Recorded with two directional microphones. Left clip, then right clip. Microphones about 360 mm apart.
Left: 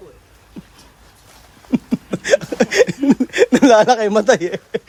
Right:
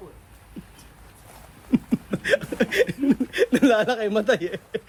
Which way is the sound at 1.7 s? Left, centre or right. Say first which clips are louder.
Left 4 dB; centre.